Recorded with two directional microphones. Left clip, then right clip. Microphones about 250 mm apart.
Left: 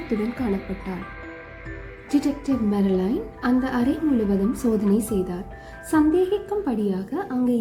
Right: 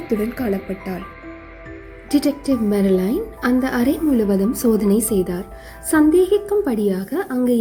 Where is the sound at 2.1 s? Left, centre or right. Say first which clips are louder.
Right 5 dB; right.